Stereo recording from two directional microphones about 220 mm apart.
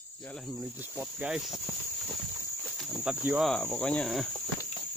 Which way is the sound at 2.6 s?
Centre (ahead or behind).